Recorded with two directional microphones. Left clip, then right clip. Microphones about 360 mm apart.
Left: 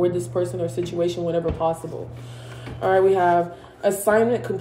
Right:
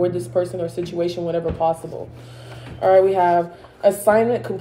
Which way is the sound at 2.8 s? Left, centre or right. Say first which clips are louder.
Right 3 dB; centre.